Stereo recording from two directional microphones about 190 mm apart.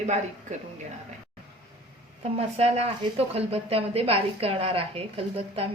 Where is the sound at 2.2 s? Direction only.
35° right (ahead or behind).